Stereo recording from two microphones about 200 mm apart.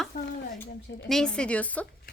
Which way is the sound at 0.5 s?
Centre (ahead or behind).